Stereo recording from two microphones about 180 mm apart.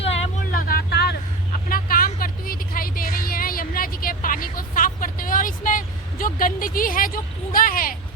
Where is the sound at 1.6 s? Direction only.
55° left (ahead or behind).